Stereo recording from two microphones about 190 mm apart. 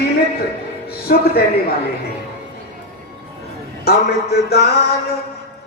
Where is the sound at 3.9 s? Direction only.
55° left (ahead or behind).